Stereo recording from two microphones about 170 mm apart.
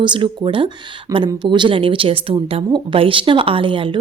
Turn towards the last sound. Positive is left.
turn(degrees=-30)  # may be behind; listen again after turning